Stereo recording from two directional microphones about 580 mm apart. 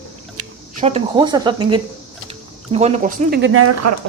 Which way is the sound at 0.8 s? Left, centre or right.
Centre.